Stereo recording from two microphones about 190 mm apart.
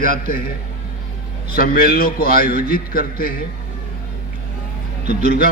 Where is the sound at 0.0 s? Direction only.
50° left (ahead or behind).